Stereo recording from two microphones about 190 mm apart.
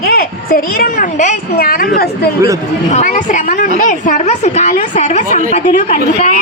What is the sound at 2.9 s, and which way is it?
A woman's voice, 40° left (ahead or behind).